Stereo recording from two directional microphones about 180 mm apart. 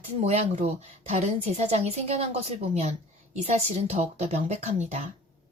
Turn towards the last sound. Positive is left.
turn(degrees=-40)  # may be behind; listen again after turning